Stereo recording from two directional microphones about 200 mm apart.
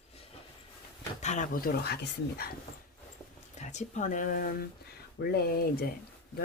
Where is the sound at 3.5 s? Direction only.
35° left (ahead or behind).